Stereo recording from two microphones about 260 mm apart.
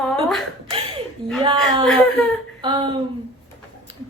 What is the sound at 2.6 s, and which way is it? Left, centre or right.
Speech, centre.